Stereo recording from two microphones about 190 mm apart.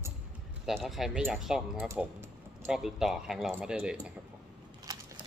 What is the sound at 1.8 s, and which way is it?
Speech, 15° right (ahead or behind).